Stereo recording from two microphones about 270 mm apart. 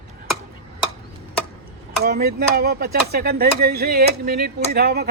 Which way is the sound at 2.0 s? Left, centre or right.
Right.